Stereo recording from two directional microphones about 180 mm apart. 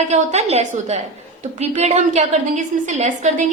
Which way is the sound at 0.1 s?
40° right (ahead or behind).